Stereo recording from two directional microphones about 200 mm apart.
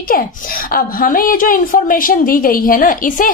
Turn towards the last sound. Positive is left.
turn(degrees=40)  # may be behind; listen again after turning